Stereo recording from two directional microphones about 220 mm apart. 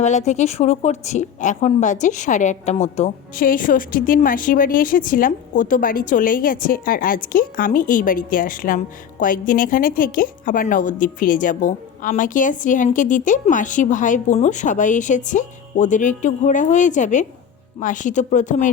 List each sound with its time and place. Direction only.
0.0 s a woman's voice: 30° left (ahead or behind)